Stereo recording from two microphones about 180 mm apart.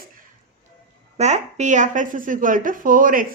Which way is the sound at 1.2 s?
40° right (ahead or behind).